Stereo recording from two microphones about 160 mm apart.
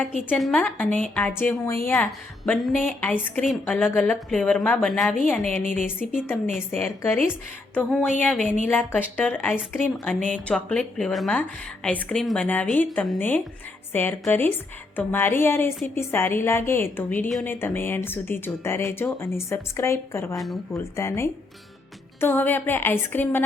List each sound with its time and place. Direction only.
0.3 s a woman's voice: 5° left (ahead or behind)
1.9 s a woman's voice: 5° left (ahead or behind)